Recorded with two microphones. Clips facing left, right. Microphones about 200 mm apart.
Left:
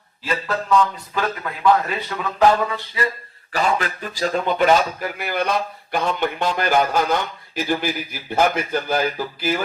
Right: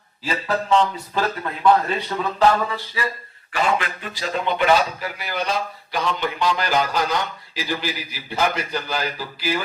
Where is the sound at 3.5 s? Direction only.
40° left (ahead or behind).